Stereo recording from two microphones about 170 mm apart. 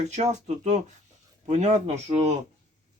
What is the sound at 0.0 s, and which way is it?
Speech, 40° right (ahead or behind).